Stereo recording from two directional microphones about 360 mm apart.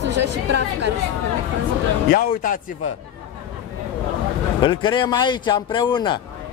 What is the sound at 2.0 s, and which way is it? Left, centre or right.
Speech, left.